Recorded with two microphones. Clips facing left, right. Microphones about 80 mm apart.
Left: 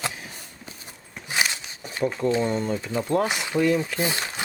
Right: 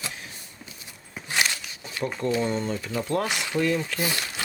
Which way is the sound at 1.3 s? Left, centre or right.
Centre.